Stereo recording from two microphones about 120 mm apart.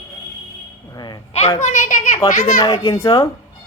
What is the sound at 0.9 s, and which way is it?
Speech, 35° left (ahead or behind).